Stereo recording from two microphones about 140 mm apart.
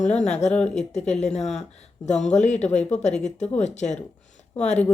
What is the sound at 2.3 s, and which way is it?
Speech, 55° left (ahead or behind).